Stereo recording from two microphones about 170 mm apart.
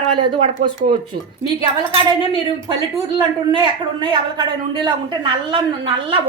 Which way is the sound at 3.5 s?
25° right (ahead or behind).